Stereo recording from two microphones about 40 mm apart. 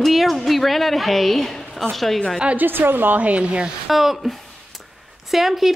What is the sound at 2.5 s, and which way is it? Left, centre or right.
Speech, right.